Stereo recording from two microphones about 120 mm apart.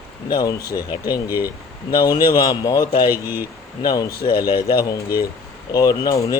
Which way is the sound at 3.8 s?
35° left (ahead or behind).